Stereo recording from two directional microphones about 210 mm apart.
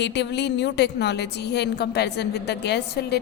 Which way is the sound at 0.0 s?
55° left (ahead or behind).